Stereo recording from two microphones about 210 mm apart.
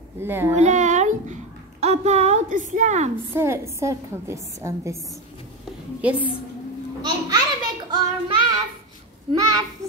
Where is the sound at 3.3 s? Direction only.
10° right (ahead or behind).